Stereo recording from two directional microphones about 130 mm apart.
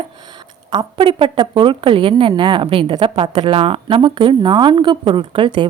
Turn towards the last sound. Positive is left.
turn(degrees=-40)  # may be behind; listen again after turning